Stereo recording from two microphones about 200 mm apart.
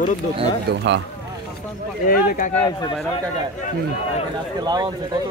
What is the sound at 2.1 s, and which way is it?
Speech, 45° left (ahead or behind).